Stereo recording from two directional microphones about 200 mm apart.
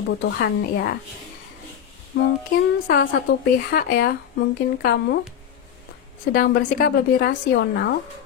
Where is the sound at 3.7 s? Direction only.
50° left (ahead or behind).